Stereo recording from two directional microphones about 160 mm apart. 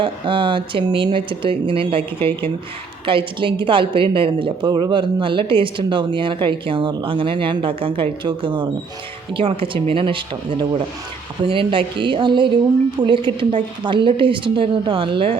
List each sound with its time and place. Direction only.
0.0 s a woman's voice: 30° right (ahead or behind)